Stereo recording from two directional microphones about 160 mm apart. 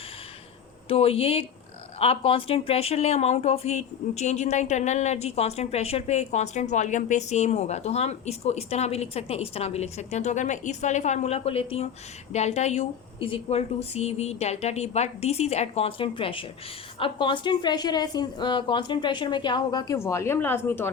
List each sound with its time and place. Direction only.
0.9 s a woman's voice: 35° left (ahead or behind); by 20.9 s 15° left (ahead or behind)